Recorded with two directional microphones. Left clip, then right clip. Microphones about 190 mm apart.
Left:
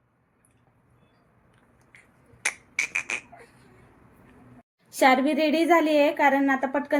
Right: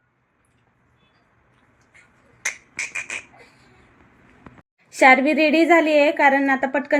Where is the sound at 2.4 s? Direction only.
35° left (ahead or behind).